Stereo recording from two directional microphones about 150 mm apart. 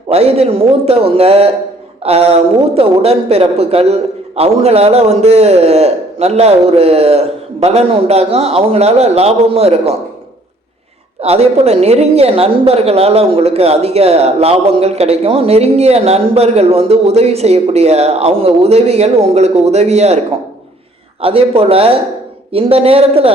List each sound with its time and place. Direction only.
0.1 s a man's voice: 45° right (ahead or behind)
11.2 s a woman's voice: 45° right (ahead or behind)
21.2 s a man's voice: 40° right (ahead or behind)